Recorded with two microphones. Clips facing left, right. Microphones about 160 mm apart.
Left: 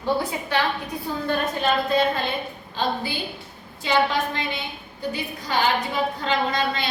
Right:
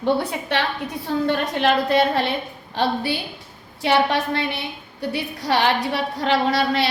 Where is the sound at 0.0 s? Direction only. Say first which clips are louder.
Right 3 dB; 65° right (ahead or behind).